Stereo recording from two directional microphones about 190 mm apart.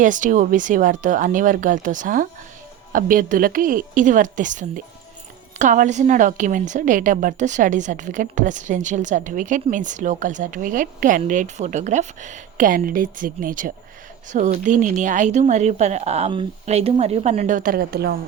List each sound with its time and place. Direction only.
0.0 s a woman's voice: 40° right (ahead or behind)